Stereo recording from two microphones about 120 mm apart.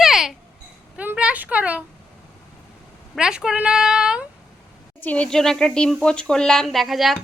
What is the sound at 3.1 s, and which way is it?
Speech, 5° right (ahead or behind).